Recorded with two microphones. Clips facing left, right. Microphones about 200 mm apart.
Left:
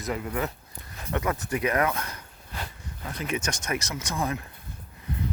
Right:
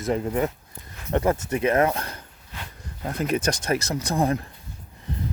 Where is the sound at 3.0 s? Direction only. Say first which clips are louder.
Right 7 dB; 45° right (ahead or behind).